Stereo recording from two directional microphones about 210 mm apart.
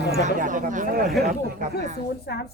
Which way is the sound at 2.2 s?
50° left (ahead or behind).